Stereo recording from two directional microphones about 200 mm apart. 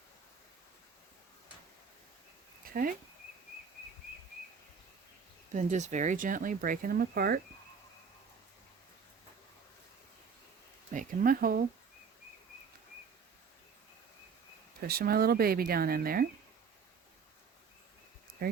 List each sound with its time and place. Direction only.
2.6 s a sound: 45° right (ahead or behind)
5.5 s speech: 35° right (ahead or behind)
10.9 s speech: 45° right (ahead or behind)
14.8 s speech: 50° right (ahead or behind)
18.4 s speech: 50° right (ahead or behind)